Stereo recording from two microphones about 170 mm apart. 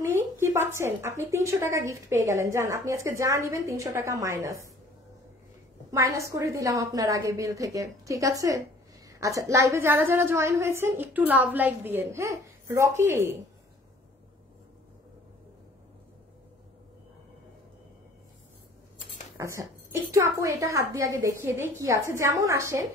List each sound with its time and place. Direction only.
0.0 s speech: 15° right (ahead or behind)
5.9 s a woman's voice: 20° right (ahead or behind)
19.3 s a woman's voice: 20° right (ahead or behind)